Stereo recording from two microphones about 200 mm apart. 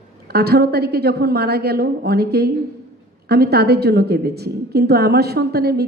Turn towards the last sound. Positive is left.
turn(degrees=-50)  # may be behind; listen again after turning